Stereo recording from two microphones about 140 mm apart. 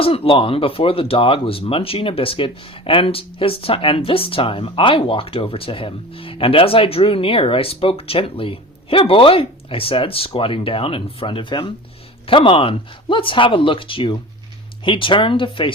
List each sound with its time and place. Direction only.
0.0 s speech: 40° left (ahead or behind)